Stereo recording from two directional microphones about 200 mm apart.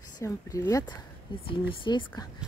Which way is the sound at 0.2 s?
15° left (ahead or behind).